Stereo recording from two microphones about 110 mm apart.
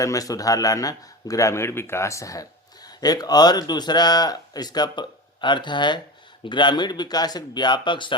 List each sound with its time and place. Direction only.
0.0 s a man's voice: 30° left (ahead or behind); by 8.1 s 45° left (ahead or behind)